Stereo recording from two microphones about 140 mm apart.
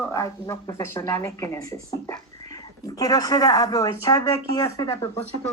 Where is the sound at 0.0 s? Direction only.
20° left (ahead or behind).